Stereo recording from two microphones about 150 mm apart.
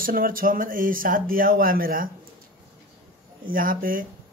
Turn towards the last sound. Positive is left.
turn(degrees=-70)  # may be behind; listen again after turning